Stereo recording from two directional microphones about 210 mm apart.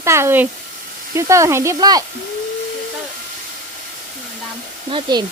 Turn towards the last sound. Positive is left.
turn(degrees=-20)  # may be behind; listen again after turning